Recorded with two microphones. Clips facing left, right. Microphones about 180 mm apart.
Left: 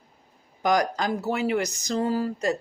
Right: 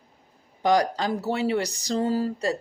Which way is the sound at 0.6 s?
30° right (ahead or behind).